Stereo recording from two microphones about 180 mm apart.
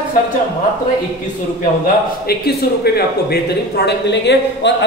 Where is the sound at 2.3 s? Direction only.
60° left (ahead or behind).